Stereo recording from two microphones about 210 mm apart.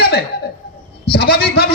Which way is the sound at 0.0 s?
50° left (ahead or behind).